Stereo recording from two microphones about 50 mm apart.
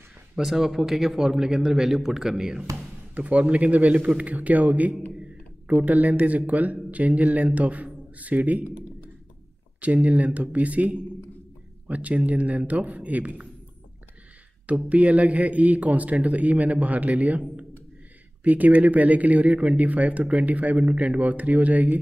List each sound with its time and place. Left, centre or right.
0.4 s a man's voice: centre
3.2 s speech: right
9.8 s a man's voice: right
14.9 s a man's voice: right